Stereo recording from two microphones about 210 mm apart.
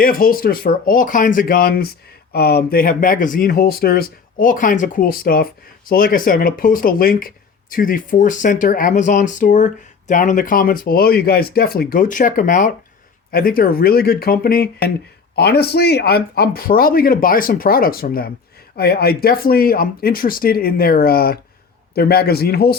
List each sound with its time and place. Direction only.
0.0 s speech: 45° left (ahead or behind)